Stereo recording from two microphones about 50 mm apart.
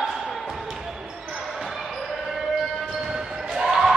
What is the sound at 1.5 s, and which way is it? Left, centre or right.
Basketball bounce, centre.